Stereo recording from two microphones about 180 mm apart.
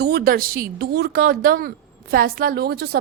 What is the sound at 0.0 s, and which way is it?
Speech, 65° right (ahead or behind).